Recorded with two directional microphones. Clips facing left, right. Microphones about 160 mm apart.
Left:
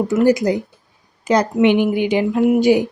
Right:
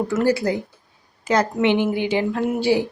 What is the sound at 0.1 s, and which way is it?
Speech, 15° left (ahead or behind).